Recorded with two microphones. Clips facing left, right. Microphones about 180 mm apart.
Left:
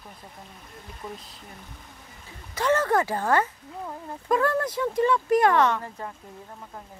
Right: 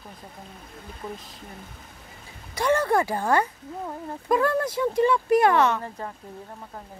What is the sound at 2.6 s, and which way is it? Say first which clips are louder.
Speech: right 1 dB; 15° right (ahead or behind).